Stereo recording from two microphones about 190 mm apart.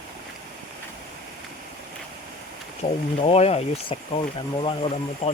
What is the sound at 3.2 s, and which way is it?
Speech, 30° left (ahead or behind).